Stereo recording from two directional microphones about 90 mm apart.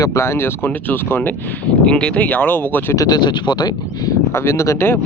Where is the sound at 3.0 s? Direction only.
50° left (ahead or behind).